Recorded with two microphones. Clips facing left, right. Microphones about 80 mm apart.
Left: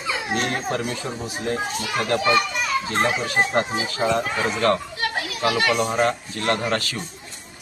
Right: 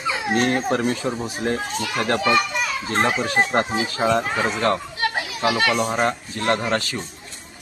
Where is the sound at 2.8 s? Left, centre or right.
Right.